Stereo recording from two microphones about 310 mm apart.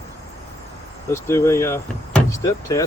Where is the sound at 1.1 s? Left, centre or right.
Centre.